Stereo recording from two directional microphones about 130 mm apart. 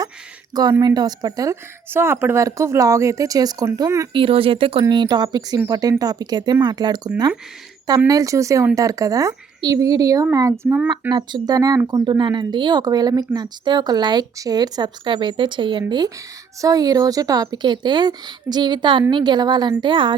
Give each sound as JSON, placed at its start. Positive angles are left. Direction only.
{"t": 0.5, "sound": "a woman's voice", "side_deg": -30}
{"t": 4.1, "sound": "a woman's voice", "side_deg": -45}
{"t": 10.7, "sound": "speech", "side_deg": -15}
{"t": 11.1, "sound": "a woman's voice", "side_deg": -35}